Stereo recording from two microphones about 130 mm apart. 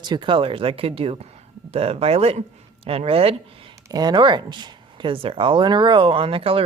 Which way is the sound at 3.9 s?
30° right (ahead or behind).